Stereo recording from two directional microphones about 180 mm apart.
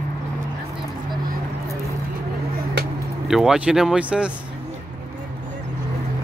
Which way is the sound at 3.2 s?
Centre (ahead or behind).